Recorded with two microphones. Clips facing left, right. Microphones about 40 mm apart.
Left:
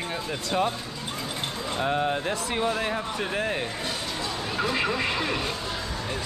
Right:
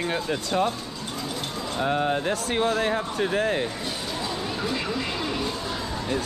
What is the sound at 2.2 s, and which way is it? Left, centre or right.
Speech, right.